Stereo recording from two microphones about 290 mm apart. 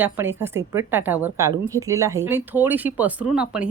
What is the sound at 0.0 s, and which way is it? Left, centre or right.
A woman's voice, centre.